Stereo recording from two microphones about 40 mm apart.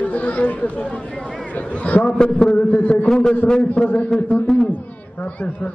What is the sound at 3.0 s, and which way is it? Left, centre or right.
Speech, centre.